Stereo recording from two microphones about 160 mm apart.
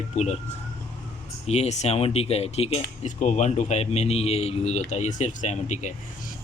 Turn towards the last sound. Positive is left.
turn(degrees=45)  # may be behind; listen again after turning